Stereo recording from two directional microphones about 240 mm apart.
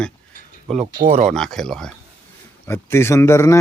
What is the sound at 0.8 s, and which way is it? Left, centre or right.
Speech, right.